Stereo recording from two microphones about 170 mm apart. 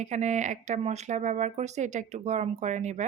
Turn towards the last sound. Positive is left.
turn(degrees=-45)  # may be behind; listen again after turning